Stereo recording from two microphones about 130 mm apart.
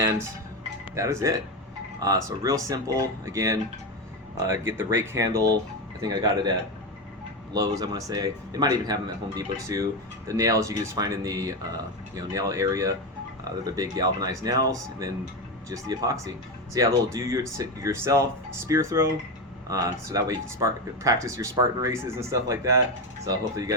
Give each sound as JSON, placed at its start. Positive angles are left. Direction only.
{"t": 0.9, "sound": "speech", "side_deg": -25}
{"t": 7.5, "sound": "speech", "side_deg": -30}